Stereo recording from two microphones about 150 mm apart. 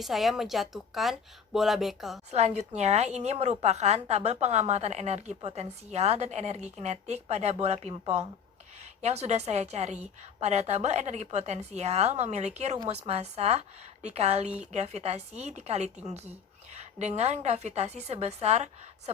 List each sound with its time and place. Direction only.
0.0 s a woman's voice: centre (ahead or behind)
2.3 s a woman's voice: 45° right (ahead or behind)
14.4 s speech: 5° right (ahead or behind)
14.7 s a woman's voice: 50° right (ahead or behind)